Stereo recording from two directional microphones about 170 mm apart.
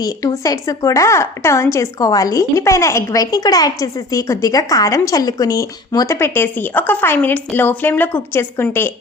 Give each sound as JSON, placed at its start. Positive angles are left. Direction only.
{"t": 0.0, "sound": "speech", "side_deg": 20}